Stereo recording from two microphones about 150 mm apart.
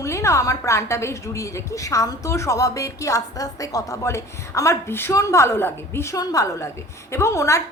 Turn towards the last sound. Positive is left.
turn(degrees=20)  # may be behind; listen again after turning